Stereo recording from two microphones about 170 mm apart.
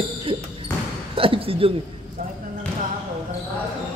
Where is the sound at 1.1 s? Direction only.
30° right (ahead or behind).